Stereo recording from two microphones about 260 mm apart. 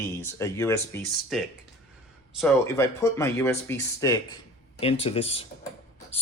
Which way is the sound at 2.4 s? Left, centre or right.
Centre.